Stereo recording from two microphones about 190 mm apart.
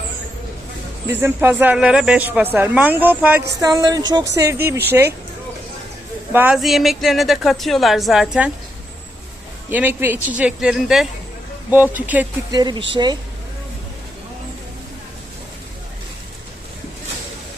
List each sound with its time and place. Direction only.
1.1 s speech: 10° right (ahead or behind)
3.6 s speech: 20° right (ahead or behind)
6.3 s speech: 5° right (ahead or behind)
9.6 s speech: 10° right (ahead or behind)
12.5 s speech: 20° right (ahead or behind)